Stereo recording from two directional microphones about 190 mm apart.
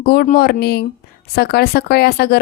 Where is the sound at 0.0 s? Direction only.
55° left (ahead or behind).